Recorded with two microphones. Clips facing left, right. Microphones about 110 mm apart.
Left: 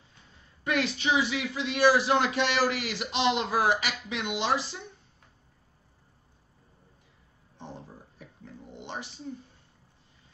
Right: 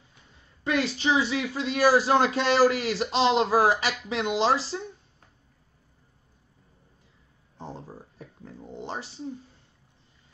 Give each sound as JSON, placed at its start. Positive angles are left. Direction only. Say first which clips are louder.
{"t": 0.7, "sound": "speech", "louder": "right 2 dB", "side_deg": -30}
{"t": 8.2, "sound": "dog", "louder": "right 3 dB", "side_deg": -35}